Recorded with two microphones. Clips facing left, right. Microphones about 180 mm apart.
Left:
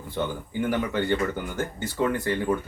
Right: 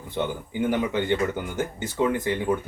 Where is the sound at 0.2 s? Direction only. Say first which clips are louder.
Right 1 dB; 20° right (ahead or behind).